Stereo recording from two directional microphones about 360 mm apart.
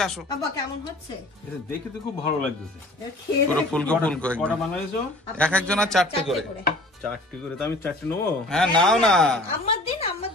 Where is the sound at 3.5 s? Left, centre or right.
Centre.